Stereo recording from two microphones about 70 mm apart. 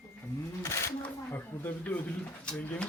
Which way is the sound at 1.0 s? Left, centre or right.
Left.